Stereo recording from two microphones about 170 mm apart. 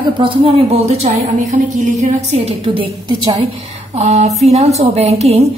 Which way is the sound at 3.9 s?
40° right (ahead or behind).